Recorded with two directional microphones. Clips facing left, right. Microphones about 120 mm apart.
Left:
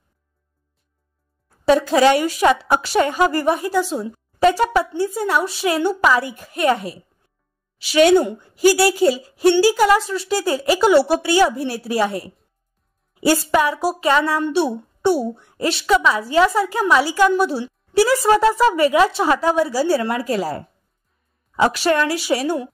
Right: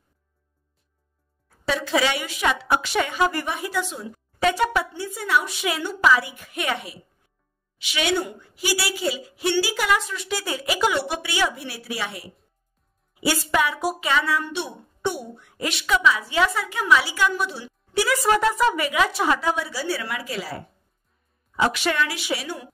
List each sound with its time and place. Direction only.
1.7 s a woman's voice: 45° left (ahead or behind)